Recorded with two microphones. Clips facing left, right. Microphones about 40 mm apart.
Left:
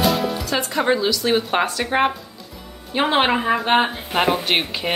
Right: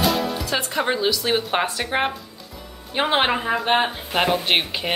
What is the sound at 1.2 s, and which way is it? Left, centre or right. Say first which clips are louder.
Speech: left 2 dB; centre.